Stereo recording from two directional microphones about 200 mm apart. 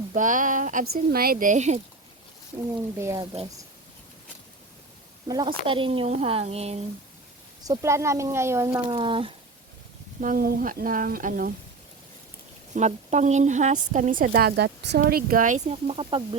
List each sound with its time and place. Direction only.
0.1 s speech: 40° right (ahead or behind)
3.0 s speech: 15° right (ahead or behind)
5.3 s speech: 20° right (ahead or behind)
7.6 s speech: 15° right (ahead or behind)
8.9 s speech: 25° right (ahead or behind)
10.2 s speech: 45° right (ahead or behind)
12.7 s speech: 35° right (ahead or behind)